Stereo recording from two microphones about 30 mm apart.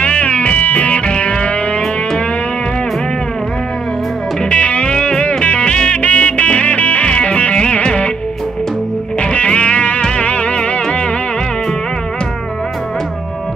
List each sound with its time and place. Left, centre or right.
0.0 s music: left
4.5 s music: left
5.7 s music: left
5.9 s music: left
7.1 s music: left
9.2 s music: left